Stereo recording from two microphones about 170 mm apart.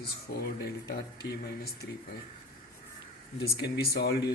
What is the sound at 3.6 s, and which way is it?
Speech, 75° left (ahead or behind).